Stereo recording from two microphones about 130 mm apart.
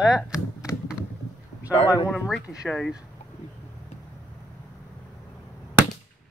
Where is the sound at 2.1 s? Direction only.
5° right (ahead or behind).